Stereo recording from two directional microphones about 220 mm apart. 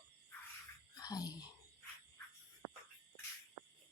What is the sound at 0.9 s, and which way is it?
Whispering, 15° left (ahead or behind).